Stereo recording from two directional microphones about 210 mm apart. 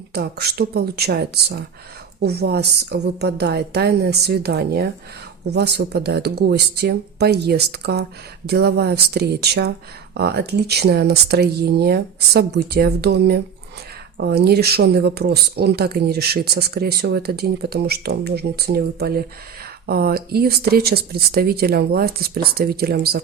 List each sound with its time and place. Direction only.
0.1 s speech: 50° right (ahead or behind)